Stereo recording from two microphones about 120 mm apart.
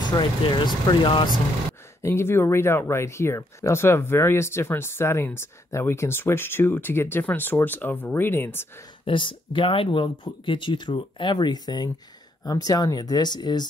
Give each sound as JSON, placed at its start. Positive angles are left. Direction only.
{"t": 0.1, "sound": "speech", "side_deg": 40}
{"t": 2.0, "sound": "speech", "side_deg": 20}
{"t": 9.0, "sound": "speech", "side_deg": 45}